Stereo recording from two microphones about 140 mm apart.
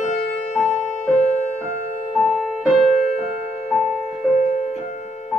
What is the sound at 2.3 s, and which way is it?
Music, centre (ahead or behind).